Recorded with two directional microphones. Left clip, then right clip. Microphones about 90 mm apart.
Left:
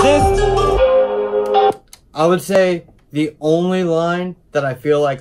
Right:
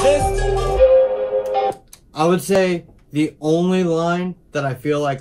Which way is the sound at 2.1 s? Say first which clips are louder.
Left 3 dB; 30° left (ahead or behind).